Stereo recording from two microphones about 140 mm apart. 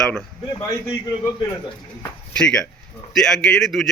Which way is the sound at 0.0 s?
5° left (ahead or behind).